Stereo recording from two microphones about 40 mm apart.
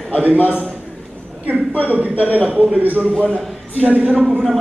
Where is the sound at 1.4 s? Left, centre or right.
Right.